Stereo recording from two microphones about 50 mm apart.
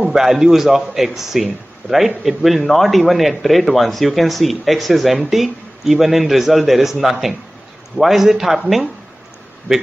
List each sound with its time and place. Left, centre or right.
0.1 s a man's voice: centre